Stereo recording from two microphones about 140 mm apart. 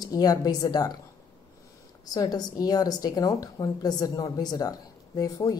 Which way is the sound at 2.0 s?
25° left (ahead or behind).